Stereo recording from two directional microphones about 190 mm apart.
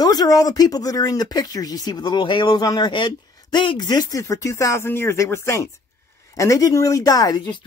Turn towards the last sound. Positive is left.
turn(degrees=20)  # may be behind; listen again after turning